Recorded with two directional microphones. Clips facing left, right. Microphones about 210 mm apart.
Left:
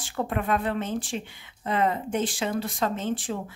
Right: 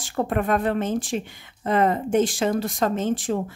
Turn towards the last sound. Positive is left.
turn(degrees=-45)  # may be behind; listen again after turning